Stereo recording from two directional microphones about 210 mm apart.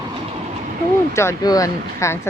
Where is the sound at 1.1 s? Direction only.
15° left (ahead or behind).